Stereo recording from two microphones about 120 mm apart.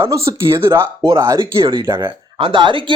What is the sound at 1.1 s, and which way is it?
Speech, 35° right (ahead or behind).